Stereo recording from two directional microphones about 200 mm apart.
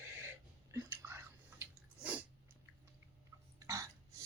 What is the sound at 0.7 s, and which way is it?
Chewing, 15° right (ahead or behind).